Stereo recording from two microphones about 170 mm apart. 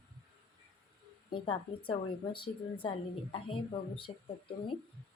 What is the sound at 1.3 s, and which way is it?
A woman's voice, 30° left (ahead or behind).